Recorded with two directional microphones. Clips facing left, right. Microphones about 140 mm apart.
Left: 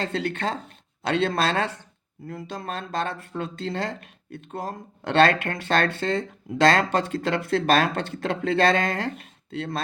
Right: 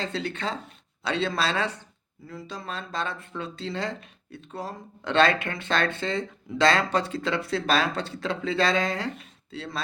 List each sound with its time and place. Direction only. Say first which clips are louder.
0.0 s speech: left 3 dB; 50° left (ahead or behind)